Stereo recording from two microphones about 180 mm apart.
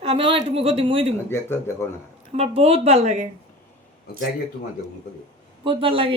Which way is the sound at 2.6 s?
35° right (ahead or behind).